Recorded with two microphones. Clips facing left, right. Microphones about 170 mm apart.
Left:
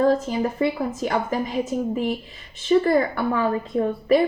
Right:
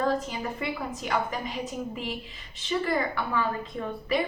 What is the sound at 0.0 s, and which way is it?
Speech, 45° left (ahead or behind).